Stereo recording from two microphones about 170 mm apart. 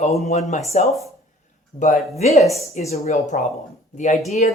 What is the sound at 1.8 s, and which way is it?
Speech, 40° left (ahead or behind).